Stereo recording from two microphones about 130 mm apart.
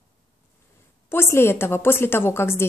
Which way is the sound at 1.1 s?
20° left (ahead or behind).